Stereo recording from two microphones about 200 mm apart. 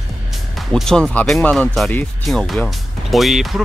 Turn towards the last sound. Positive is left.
turn(degrees=0)  # may be behind; listen again after turning